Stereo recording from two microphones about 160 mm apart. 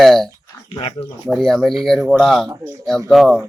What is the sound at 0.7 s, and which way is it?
Speech, 35° left (ahead or behind).